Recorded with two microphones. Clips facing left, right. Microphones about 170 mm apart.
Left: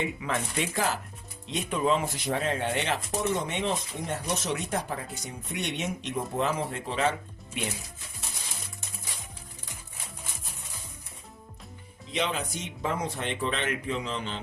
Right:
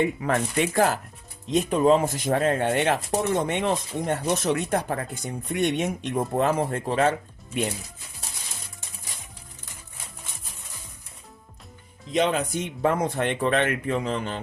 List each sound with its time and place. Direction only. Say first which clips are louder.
0.0 s speech: right 7 dB; 50° right (ahead or behind)
1.5 s speech: right 7 dB; 40° right (ahead or behind)
12.1 s speech: right 7 dB; 50° right (ahead or behind)